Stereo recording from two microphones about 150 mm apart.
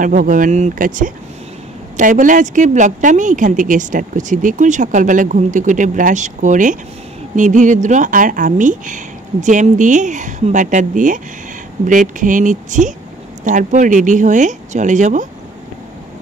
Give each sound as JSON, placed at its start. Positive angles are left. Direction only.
{"t": 0.0, "sound": "speech", "side_deg": -60}